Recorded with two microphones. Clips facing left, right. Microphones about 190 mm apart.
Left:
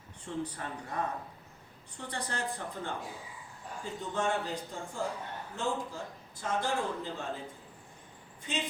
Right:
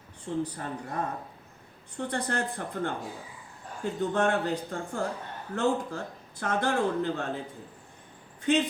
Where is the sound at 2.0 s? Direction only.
55° right (ahead or behind).